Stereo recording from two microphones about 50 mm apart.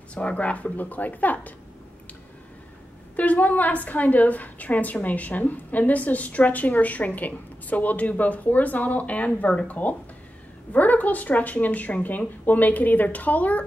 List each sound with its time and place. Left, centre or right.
0.1 s a woman's voice: left
3.2 s a woman's voice: left